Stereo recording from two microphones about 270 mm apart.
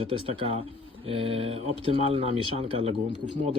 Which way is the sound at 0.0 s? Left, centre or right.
Centre.